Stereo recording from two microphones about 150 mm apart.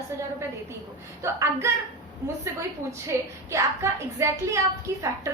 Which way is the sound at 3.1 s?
20° right (ahead or behind).